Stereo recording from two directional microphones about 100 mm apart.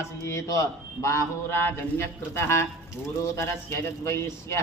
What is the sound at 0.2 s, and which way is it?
A man's voice, 30° left (ahead or behind).